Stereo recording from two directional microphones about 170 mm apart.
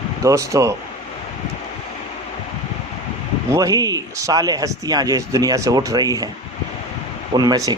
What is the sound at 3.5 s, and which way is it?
Speech, 20° right (ahead or behind).